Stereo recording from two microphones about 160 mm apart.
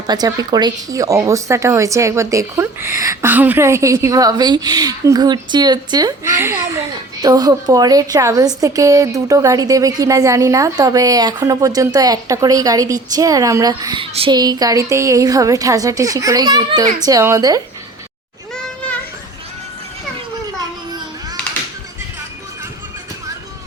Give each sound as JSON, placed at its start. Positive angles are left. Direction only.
{"t": 0.1, "sound": "speech", "side_deg": -25}